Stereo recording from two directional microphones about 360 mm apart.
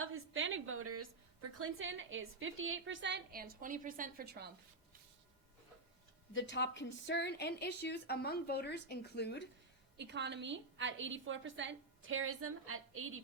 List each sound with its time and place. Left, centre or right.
0.0 s a woman's voice: right
6.3 s a woman's voice: left
10.0 s a woman's voice: right